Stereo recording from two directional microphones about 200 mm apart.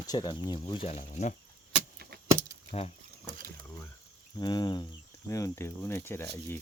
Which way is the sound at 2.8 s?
30° left (ahead or behind).